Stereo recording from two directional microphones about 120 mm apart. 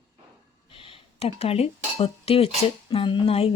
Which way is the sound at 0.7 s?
45° left (ahead or behind).